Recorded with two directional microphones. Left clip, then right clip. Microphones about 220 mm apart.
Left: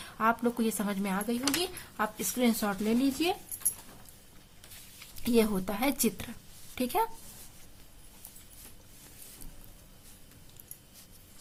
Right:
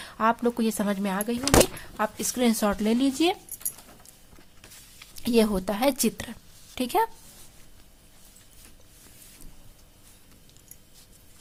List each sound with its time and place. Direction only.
0.0 s speech: 35° right (ahead or behind)
5.1 s speech: 35° right (ahead or behind)